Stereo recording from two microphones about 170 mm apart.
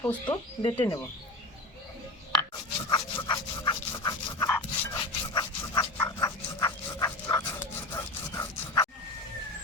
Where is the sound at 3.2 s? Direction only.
25° left (ahead or behind).